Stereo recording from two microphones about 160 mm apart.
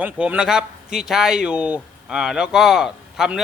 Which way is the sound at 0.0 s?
10° right (ahead or behind).